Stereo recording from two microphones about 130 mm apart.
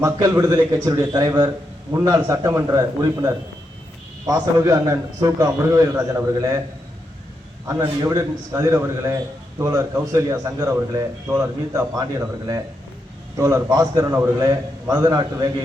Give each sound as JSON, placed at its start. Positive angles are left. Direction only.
{"t": 0.0, "sound": "a man's voice", "side_deg": -25}
{"t": 7.7, "sound": "a man's voice", "side_deg": -20}